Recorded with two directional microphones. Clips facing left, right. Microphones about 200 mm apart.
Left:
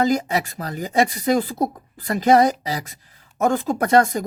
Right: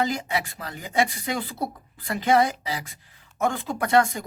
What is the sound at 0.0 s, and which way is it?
Speech, 40° left (ahead or behind).